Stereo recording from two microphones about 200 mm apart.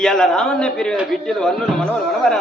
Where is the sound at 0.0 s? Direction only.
Centre (ahead or behind).